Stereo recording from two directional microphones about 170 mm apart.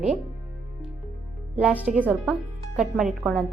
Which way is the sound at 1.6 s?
10° right (ahead or behind).